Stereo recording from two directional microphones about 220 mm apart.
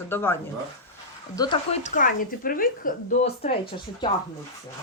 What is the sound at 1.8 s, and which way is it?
A woman's voice, 35° left (ahead or behind).